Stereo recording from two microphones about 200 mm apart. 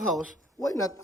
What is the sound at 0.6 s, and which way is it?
Speech, 15° left (ahead or behind).